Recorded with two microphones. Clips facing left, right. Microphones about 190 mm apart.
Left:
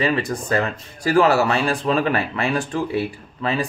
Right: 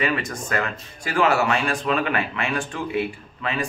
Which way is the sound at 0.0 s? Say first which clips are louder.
Left 4 dB; 35° left (ahead or behind).